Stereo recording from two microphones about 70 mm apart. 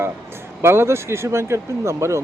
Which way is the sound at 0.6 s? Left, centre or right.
Right.